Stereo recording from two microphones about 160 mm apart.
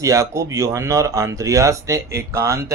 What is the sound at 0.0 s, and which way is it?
Speech, 20° right (ahead or behind).